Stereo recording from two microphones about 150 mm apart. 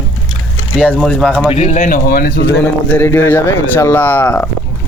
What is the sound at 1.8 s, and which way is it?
Speech, 70° left (ahead or behind).